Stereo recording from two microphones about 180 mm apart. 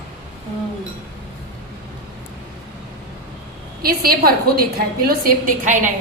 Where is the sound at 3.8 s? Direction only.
55° right (ahead or behind).